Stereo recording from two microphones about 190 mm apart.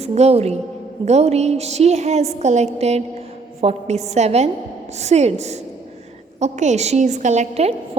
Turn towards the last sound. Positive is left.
turn(degrees=-35)  # may be behind; listen again after turning